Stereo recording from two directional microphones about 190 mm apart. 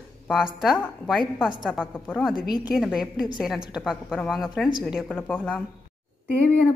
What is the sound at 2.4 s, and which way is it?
Speech, 20° left (ahead or behind).